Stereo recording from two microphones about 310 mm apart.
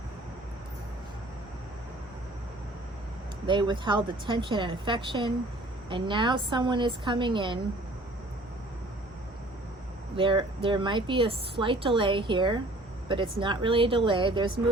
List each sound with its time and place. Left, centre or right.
3.4 s a woman's voice: centre
10.2 s a woman's voice: centre